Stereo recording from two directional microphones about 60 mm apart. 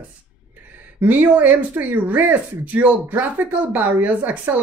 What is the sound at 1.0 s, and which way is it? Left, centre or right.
Speech, right.